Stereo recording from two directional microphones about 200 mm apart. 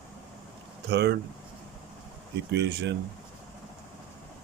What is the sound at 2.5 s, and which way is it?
Speech, 60° right (ahead or behind).